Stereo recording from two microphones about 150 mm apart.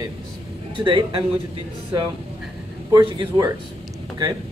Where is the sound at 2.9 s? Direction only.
30° right (ahead or behind).